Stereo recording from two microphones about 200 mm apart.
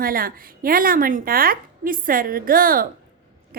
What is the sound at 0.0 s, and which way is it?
A woman's voice, 45° right (ahead or behind).